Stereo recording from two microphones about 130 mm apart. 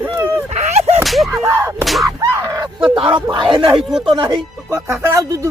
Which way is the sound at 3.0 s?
40° right (ahead or behind).